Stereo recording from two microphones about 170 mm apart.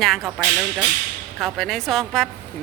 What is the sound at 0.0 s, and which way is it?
A woman's voice, centre (ahead or behind).